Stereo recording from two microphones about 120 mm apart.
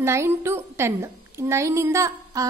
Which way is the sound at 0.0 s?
25° right (ahead or behind).